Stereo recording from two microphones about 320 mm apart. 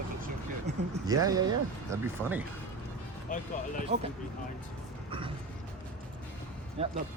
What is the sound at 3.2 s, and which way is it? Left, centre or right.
Speech, left.